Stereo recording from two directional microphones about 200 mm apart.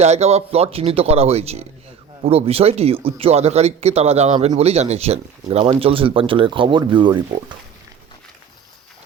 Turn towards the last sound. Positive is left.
turn(degrees=-25)  # may be behind; listen again after turning